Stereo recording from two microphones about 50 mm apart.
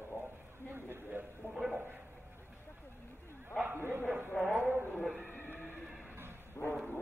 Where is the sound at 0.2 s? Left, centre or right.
Right.